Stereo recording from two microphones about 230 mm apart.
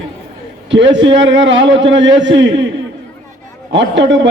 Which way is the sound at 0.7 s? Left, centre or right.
Right.